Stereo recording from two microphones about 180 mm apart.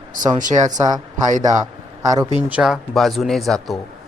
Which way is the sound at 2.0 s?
20° right (ahead or behind).